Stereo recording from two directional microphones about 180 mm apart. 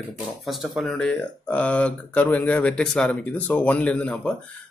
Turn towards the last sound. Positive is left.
turn(degrees=5)  # may be behind; listen again after turning